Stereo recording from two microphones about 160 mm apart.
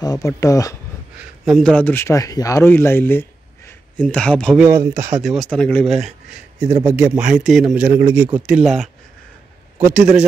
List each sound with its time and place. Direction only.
0.0 s speech: 25° left (ahead or behind)
1.4 s speech: centre (ahead or behind)
4.6 s a man's voice: 15° right (ahead or behind)
4.9 s speech: 50° right (ahead or behind)
5.2 s speech: centre (ahead or behind)
6.8 s a man's voice: 15° right (ahead or behind)
7.2 s a man's voice: 5° right (ahead or behind)